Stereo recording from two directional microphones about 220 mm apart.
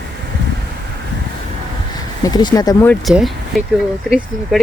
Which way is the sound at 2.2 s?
20° left (ahead or behind).